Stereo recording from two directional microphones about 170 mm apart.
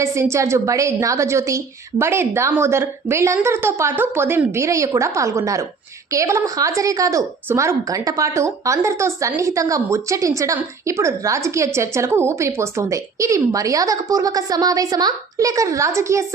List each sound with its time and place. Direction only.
0.0 s a woman's voice: 15° right (ahead or behind)